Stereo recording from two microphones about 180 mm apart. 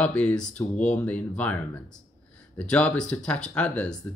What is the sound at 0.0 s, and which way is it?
Speech, 5° left (ahead or behind).